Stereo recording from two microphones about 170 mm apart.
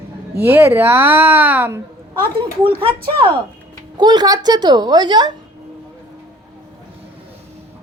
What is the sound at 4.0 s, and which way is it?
A woman's voice, 25° right (ahead or behind).